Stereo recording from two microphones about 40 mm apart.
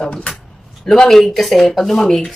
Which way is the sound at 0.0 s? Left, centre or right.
Left.